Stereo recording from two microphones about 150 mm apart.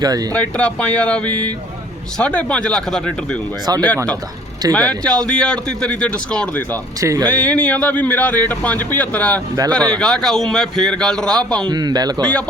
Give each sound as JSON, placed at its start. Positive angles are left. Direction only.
{"t": 0.0, "sound": "a man's voice", "side_deg": -25}
{"t": 0.3, "sound": "speech", "side_deg": 5}
{"t": 7.0, "sound": "a man's voice", "side_deg": -20}
{"t": 7.3, "sound": "speech", "side_deg": 10}
{"t": 11.7, "sound": "a man's voice", "side_deg": -25}
{"t": 12.2, "sound": "speech", "side_deg": 10}